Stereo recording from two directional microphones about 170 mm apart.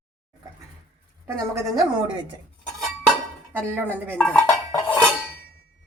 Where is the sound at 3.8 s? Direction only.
10° left (ahead or behind).